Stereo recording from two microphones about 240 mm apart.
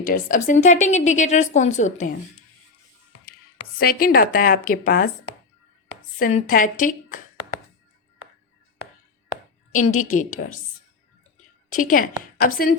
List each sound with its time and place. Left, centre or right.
0.0 s a woman's voice: left
3.8 s a woman's voice: left
6.1 s a woman's voice: left
9.3 s a sound: left
11.7 s a woman's voice: left